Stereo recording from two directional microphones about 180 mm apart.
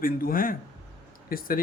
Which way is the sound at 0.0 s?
55° left (ahead or behind).